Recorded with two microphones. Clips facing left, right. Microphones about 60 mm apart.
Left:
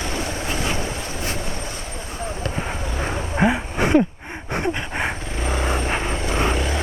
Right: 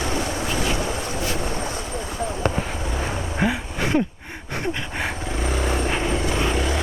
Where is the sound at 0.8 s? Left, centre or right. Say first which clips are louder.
Right 2 dB; right.